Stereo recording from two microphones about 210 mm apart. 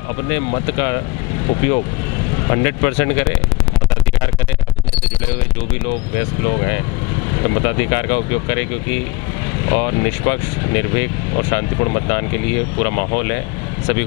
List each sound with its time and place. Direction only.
0.5 s speech: 20° left (ahead or behind)
2.5 s speech: 20° left (ahead or behind)
7.4 s speech: 15° left (ahead or behind)
9.7 s speech: 25° left (ahead or behind)